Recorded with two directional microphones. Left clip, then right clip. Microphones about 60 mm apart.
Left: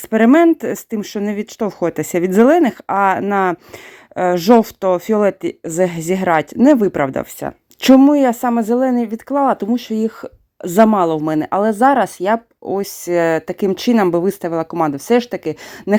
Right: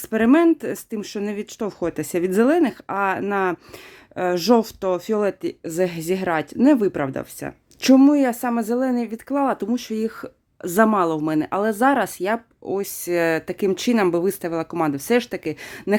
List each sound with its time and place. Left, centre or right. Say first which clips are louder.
0.1 s speech: left 6 dB; left
0.6 s speech: left 6 dB; left
0.9 s speech: left 5 dB; left
1.8 s speech: left 5 dB; left
4.1 s speech: left 6 dB; left
6.6 s speech: left 3 dB; left
7.0 s speech: left 8 dB; left
7.9 s speech: left 5 dB; left
11.5 s speech: left 7 dB; left
14.7 s speech: left 5 dB; centre